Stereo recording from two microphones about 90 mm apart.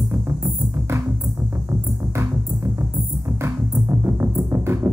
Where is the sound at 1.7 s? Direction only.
30° right (ahead or behind).